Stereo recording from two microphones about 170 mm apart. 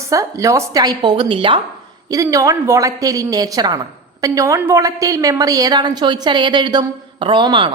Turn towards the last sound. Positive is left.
turn(degrees=-30)  # may be behind; listen again after turning